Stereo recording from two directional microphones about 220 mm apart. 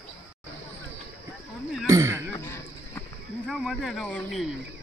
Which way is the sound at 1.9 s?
15° right (ahead or behind).